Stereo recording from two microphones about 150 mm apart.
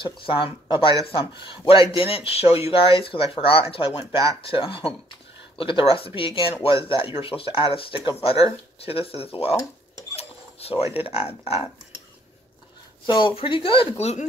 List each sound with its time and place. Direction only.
0.0 s speech: 35° left (ahead or behind)
10.1 s mechanisms: 40° left (ahead or behind)
11.1 s speech: 40° left (ahead or behind)
13.0 s speech: 30° left (ahead or behind)